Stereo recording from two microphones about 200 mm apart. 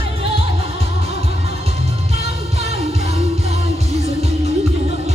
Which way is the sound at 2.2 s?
30° right (ahead or behind).